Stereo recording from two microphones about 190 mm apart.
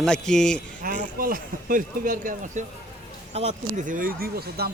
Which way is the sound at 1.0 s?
45° right (ahead or behind).